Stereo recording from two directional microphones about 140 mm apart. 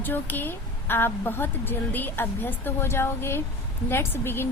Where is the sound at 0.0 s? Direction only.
15° left (ahead or behind).